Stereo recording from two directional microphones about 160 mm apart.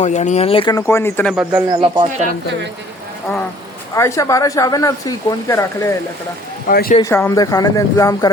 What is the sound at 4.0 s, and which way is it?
Speech, 20° left (ahead or behind).